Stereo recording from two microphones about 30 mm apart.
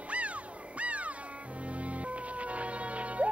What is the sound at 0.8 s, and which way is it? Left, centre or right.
Music, right.